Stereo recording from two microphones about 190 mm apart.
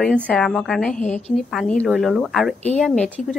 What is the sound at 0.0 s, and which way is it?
A woman's voice, 5° left (ahead or behind).